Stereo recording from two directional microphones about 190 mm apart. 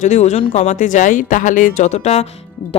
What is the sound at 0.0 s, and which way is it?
Speech, 35° left (ahead or behind).